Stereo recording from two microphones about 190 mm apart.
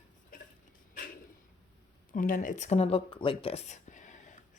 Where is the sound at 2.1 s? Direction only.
45° left (ahead or behind).